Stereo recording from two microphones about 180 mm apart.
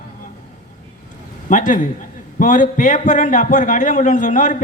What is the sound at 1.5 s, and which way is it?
A man's voice, 45° left (ahead or behind).